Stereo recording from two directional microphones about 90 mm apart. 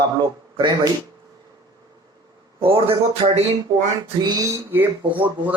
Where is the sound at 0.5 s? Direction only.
55° right (ahead or behind).